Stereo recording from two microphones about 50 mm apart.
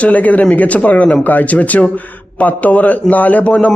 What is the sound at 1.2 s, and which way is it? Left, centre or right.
A man's voice, left.